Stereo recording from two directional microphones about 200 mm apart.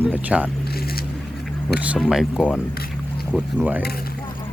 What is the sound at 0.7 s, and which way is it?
Vehicle, 50° left (ahead or behind).